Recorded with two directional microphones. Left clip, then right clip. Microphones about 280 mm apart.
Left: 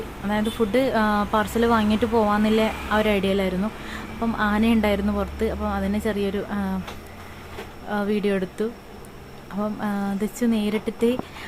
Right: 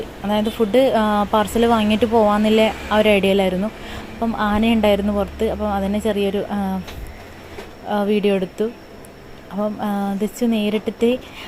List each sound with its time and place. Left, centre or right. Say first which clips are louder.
0.3 s speech: right 5 dB; centre
7.9 s speech: right 6 dB; centre